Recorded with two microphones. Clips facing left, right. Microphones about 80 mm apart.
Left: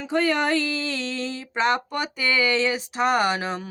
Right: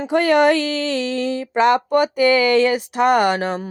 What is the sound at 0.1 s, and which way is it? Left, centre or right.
Speech, right.